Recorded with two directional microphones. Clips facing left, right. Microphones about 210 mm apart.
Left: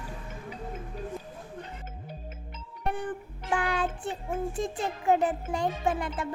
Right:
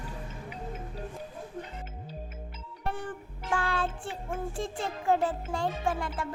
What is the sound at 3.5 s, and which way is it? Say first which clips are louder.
Child singing: left 2 dB; 15° left (ahead or behind).